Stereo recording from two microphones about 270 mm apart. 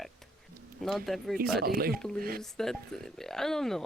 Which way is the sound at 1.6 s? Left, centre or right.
Right.